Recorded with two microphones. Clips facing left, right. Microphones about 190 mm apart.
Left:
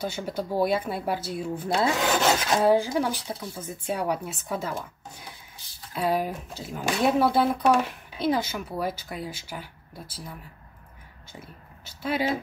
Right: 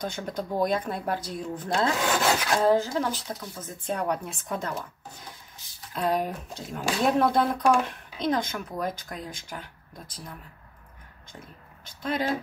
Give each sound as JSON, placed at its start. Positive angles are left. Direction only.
{"t": 0.0, "sound": "speech", "side_deg": 5}
{"t": 2.1, "sound": "filing", "side_deg": 20}
{"t": 2.6, "sound": "speech", "side_deg": 10}
{"t": 11.3, "sound": "speech", "side_deg": 5}